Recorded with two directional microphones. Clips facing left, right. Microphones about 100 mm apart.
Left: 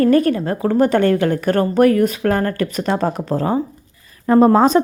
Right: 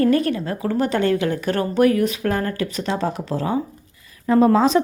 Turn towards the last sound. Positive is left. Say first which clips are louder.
# left 4 dB
turn(degrees=45)  # may be behind; listen again after turning